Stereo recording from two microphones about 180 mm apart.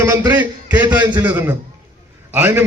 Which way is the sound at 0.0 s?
15° right (ahead or behind).